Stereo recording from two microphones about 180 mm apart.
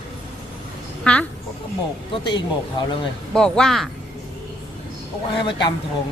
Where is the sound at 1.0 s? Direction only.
5° left (ahead or behind).